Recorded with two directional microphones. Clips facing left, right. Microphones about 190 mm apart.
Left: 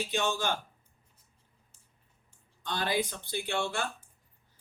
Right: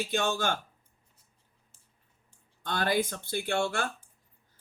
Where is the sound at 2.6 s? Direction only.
50° right (ahead or behind).